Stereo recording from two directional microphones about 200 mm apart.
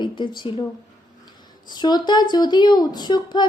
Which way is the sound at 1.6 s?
20° left (ahead or behind).